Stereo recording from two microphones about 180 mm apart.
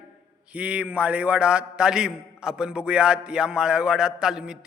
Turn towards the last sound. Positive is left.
turn(degrees=-5)  # may be behind; listen again after turning